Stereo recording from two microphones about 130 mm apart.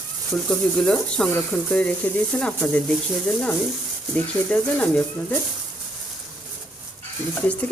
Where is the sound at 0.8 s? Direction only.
5° left (ahead or behind).